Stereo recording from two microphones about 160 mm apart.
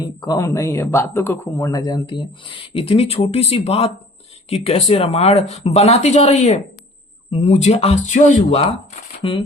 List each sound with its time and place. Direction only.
0.0 s speech: 25° left (ahead or behind)